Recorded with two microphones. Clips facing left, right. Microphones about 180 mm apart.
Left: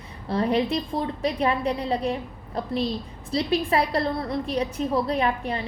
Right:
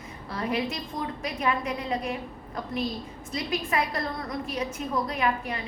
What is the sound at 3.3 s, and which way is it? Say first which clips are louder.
A woman's voice: left 6 dB; 35° left (ahead or behind).